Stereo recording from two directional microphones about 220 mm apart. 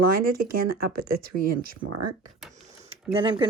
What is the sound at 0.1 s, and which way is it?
Speech, 40° right (ahead or behind).